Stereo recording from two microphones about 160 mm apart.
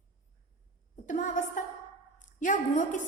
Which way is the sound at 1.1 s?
50° left (ahead or behind).